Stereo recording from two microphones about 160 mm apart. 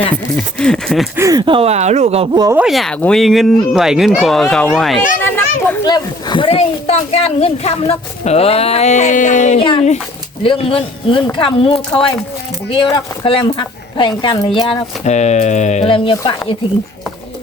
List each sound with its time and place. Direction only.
0.3 s speech: 5° left (ahead or behind)
1.1 s speech: 20° right (ahead or behind); by 2.3 s 40° right (ahead or behind)
2.3 s speech: 25° right (ahead or behind)
2.6 s speech: centre (ahead or behind)
5.8 s speech: 25° left (ahead or behind); by 9.6 s 50° left (ahead or behind)
9.6 s speech: 30° left (ahead or behind)
15.0 s speech: 45° left (ahead or behind)